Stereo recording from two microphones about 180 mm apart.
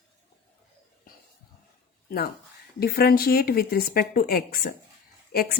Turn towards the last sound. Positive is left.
turn(degrees=60)  # may be behind; listen again after turning